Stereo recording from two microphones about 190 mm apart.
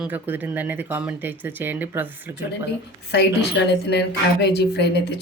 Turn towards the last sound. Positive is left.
turn(degrees=60)  # may be behind; listen again after turning